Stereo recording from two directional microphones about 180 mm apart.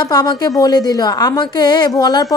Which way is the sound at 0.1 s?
20° left (ahead or behind).